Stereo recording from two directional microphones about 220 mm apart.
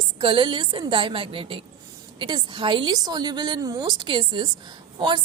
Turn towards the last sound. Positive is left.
turn(degrees=-20)  # may be behind; listen again after turning